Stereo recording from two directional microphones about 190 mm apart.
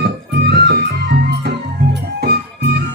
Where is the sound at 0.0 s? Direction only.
60° right (ahead or behind).